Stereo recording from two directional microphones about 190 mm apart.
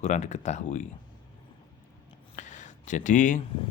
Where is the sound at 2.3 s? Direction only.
40° left (ahead or behind).